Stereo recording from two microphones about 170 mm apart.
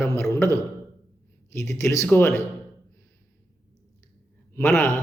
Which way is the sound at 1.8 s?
15° left (ahead or behind).